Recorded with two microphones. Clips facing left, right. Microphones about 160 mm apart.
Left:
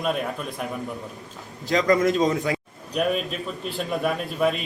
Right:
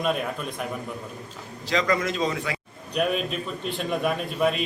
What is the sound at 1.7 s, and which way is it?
Speech, 45° left (ahead or behind).